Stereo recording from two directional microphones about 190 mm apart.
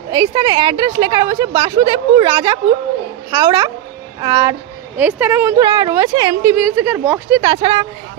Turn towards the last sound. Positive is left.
turn(degrees=-25)  # may be behind; listen again after turning